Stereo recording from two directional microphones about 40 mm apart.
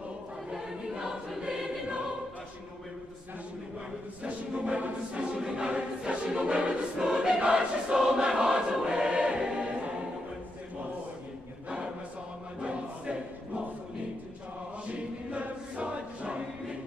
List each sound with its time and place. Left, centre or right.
0.5 s choir: centre
4.2 s music: right
5.4 s choir: centre
12.5 s choir: right
14.9 s choir: right